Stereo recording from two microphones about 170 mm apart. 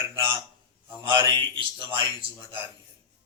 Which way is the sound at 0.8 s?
30° right (ahead or behind).